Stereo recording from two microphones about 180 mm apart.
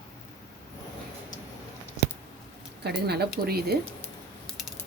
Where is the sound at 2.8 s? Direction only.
65° right (ahead or behind).